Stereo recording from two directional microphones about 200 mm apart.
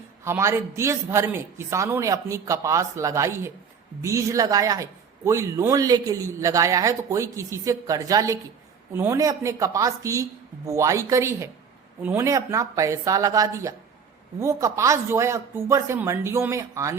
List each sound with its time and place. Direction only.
0.3 s speech: 15° right (ahead or behind)